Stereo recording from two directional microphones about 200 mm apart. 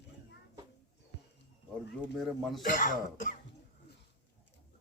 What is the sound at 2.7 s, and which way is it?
Speech, 45° left (ahead or behind).